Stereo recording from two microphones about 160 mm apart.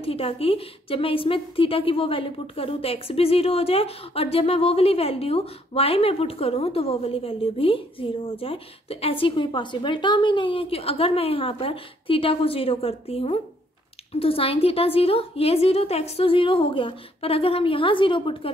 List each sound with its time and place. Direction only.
0.0 s a woman's voice: 35° left (ahead or behind)